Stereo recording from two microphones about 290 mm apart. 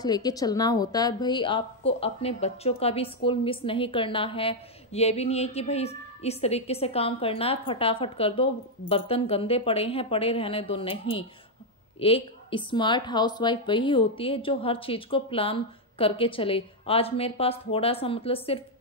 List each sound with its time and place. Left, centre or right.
0.0 s a woman's voice: centre